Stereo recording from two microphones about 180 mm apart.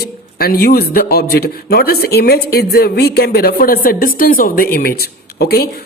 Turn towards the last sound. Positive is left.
turn(degrees=60)  # may be behind; listen again after turning